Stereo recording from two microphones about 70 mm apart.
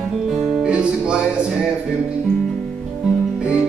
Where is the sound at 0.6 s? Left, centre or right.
Centre.